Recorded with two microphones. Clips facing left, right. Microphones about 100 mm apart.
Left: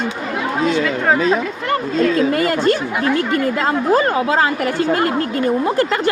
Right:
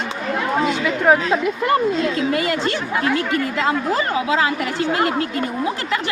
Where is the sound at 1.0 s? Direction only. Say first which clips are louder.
Right 2 dB; 10° right (ahead or behind).